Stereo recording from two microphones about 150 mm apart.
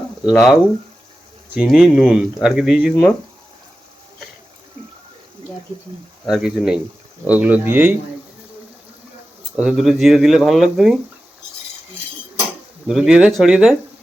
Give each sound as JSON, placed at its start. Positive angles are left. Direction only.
{"t": 0.3, "sound": "speech", "side_deg": 0}
{"t": 6.2, "sound": "speech", "side_deg": -5}
{"t": 9.6, "sound": "speech", "side_deg": -5}
{"t": 12.9, "sound": "speech", "side_deg": -5}